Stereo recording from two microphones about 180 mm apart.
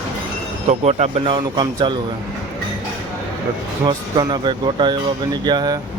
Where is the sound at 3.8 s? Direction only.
25° right (ahead or behind).